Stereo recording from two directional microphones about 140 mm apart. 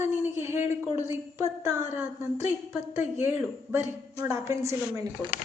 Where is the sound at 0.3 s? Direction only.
20° right (ahead or behind).